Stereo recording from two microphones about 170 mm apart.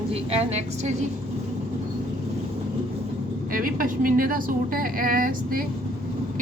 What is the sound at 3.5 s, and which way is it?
A woman's voice, 55° right (ahead or behind).